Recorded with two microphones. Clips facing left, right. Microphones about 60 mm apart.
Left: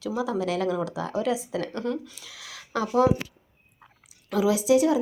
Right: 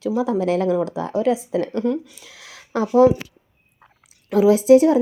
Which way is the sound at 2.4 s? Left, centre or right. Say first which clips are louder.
Right 5 dB; right.